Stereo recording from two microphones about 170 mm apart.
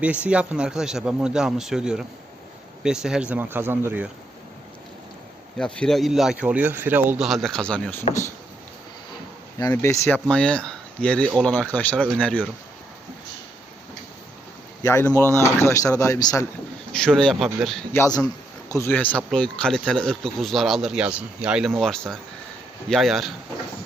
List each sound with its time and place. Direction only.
0.0 s speech: 5° right (ahead or behind)
5.5 s speech: 5° left (ahead or behind)
9.6 s speech: 20° left (ahead or behind)
14.8 s speech: 15° left (ahead or behind)
16.9 s speech: 5° left (ahead or behind)
17.9 s speech: 15° left (ahead or behind); by 23.3 s centre (ahead or behind)